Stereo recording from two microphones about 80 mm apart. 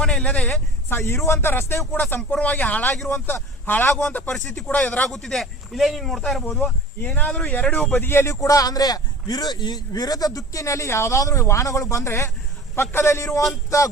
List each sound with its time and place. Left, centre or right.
0.0 s speech: centre
0.9 s speech: left
2.3 s speech: centre
2.9 s speech: centre
3.2 s a man's voice: left
4.3 s speech: centre
4.7 s speech: centre
7.5 s speech: centre
7.8 s speech: centre
8.0 s speech: left